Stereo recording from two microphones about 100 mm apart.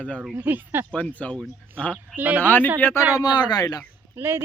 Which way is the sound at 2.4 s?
20° left (ahead or behind).